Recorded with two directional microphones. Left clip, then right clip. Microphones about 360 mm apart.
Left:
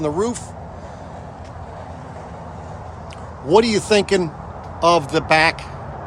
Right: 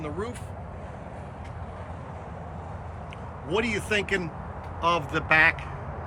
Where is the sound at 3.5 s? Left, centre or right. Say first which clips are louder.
Left 12 dB; centre.